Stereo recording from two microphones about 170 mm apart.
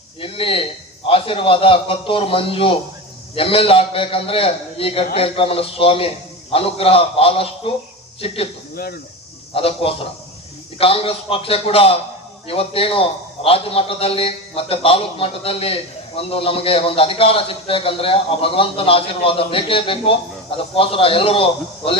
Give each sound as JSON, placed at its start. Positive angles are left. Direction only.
{"t": 0.2, "sound": "a man's voice", "side_deg": 30}
{"t": 8.7, "sound": "speech", "side_deg": 60}
{"t": 9.6, "sound": "a man's voice", "side_deg": 35}